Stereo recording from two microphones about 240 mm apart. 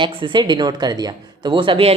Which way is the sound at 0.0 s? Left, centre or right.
Right.